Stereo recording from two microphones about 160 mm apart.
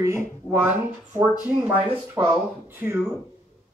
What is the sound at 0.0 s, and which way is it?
Speech, 20° right (ahead or behind).